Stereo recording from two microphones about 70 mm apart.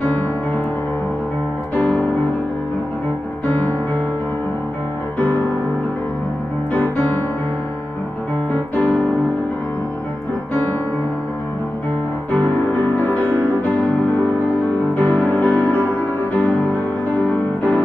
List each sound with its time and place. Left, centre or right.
1.8 s music: left
3.4 s music: left
5.2 s music: left
8.5 s piano: left
13.0 s music: left